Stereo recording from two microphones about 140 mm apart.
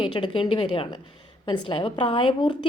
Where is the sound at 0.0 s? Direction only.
35° left (ahead or behind).